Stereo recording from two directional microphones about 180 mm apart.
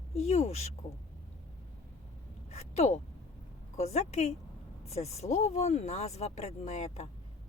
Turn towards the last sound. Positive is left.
turn(degrees=40)  # may be behind; listen again after turning